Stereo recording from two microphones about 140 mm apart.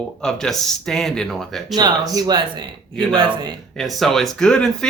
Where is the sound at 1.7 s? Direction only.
30° right (ahead or behind).